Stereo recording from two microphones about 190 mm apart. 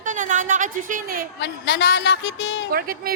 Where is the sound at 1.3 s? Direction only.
60° left (ahead or behind).